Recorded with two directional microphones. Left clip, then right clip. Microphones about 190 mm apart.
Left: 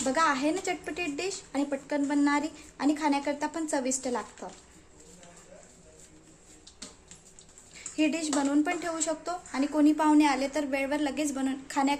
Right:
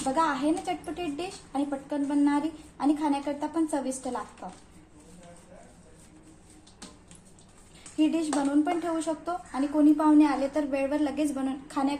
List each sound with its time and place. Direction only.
0.1 s a woman's voice: 55° left (ahead or behind)
7.9 s a woman's voice: 50° left (ahead or behind)